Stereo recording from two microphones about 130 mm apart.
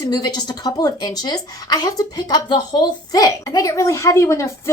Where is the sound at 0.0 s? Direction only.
30° left (ahead or behind).